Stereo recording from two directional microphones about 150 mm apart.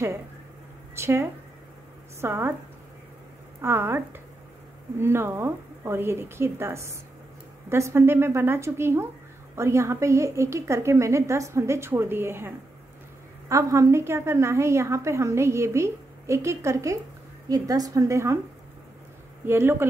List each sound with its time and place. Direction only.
0.9 s speech: 15° right (ahead or behind)
3.6 s a woman's voice: 15° right (ahead or behind)
19.4 s speech: 15° right (ahead or behind)